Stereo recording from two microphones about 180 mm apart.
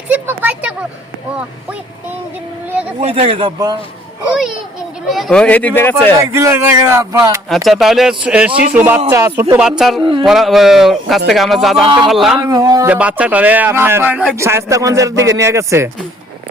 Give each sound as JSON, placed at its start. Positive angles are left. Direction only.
{"t": 0.1, "sound": "speech", "side_deg": -10}
{"t": 3.0, "sound": "speech", "side_deg": -35}
{"t": 5.0, "sound": "speech", "side_deg": 0}
{"t": 6.3, "sound": "a man's voice", "side_deg": -15}
{"t": 7.5, "sound": "a man's voice", "side_deg": 0}
{"t": 10.0, "sound": "speech", "side_deg": -25}
{"t": 10.2, "sound": "speech", "side_deg": 0}
{"t": 12.5, "sound": "speech", "side_deg": -20}
{"t": 12.9, "sound": "a man's voice", "side_deg": -5}